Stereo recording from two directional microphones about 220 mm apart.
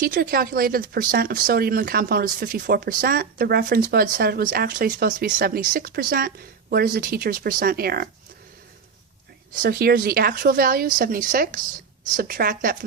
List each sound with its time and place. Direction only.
0.0 s speech: 40° right (ahead or behind)
9.6 s a woman's voice: 45° right (ahead or behind)